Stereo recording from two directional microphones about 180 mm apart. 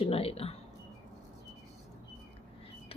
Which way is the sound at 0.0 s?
35° left (ahead or behind).